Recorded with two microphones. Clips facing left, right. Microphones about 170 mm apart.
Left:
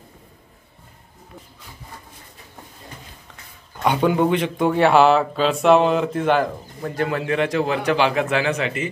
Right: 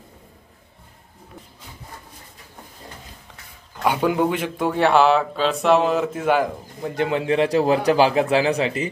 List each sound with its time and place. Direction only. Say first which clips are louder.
3.8 s speech: left 1 dB; 5° right (ahead or behind)
7.0 s a man's voice: right 2 dB; 25° right (ahead or behind)